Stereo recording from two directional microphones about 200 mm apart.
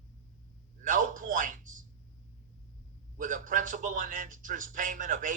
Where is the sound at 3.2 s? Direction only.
40° right (ahead or behind).